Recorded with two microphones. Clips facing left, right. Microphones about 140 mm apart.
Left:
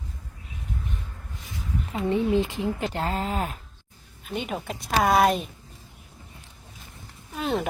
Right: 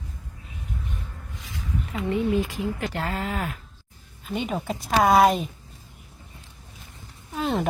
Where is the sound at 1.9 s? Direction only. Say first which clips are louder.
Left 1 dB; 30° left (ahead or behind).